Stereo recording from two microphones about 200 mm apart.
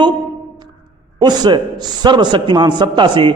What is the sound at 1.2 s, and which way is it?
A man's voice, 20° right (ahead or behind).